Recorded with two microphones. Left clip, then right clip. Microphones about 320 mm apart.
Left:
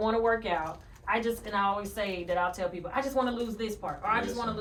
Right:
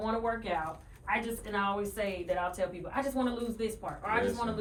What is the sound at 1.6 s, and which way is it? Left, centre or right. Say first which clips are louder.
Speech: left 3 dB; centre.